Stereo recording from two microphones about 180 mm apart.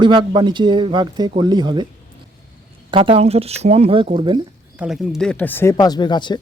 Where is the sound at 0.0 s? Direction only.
25° right (ahead or behind).